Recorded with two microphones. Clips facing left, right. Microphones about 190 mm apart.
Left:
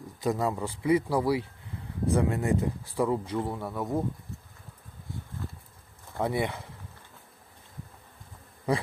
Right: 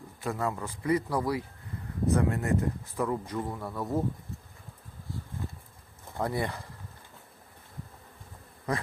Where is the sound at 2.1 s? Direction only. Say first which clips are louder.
Left 2 dB; 15° left (ahead or behind).